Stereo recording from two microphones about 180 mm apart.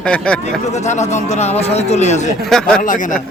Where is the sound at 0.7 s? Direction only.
40° left (ahead or behind).